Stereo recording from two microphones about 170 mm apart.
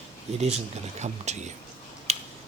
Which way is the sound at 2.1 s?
40° right (ahead or behind).